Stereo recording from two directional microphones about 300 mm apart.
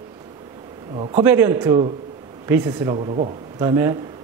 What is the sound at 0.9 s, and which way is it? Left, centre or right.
Speech, centre.